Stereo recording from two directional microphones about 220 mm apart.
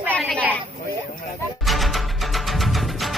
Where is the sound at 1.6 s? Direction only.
Centre (ahead or behind).